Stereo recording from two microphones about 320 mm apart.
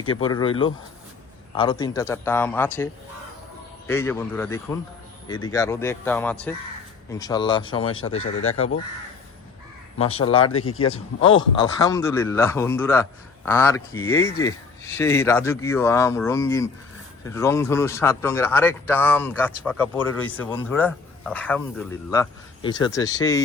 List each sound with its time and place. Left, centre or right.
0.0 s a man's voice: centre
8.1 s speech: left
10.0 s a man's voice: centre
10.4 s speech: left
11.2 s a man's voice: centre